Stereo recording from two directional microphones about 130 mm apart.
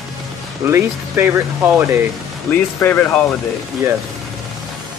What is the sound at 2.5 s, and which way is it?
Speech, 15° left (ahead or behind).